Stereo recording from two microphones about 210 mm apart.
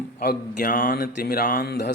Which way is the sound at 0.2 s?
45° left (ahead or behind).